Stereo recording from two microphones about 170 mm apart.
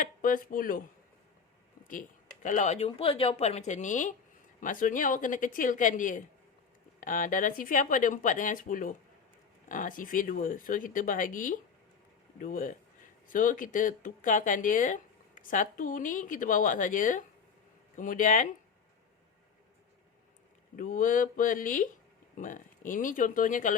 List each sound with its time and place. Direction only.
0.0 s speech: 55° left (ahead or behind)
1.8 s speech: 50° left (ahead or behind)
20.7 s speech: 50° left (ahead or behind)